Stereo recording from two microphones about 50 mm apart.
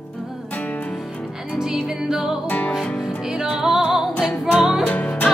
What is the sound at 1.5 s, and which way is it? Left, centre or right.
Music, centre.